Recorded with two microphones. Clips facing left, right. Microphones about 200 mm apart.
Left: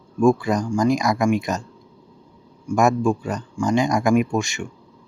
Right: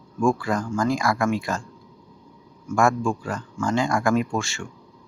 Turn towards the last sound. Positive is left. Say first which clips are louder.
# left 4 dB
turn(degrees=15)  # may be behind; listen again after turning